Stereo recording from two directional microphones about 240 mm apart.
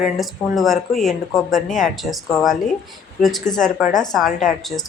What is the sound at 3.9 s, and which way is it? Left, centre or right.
Speech, centre.